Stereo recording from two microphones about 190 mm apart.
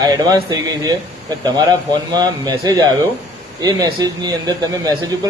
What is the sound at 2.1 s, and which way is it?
Speech, 20° right (ahead or behind).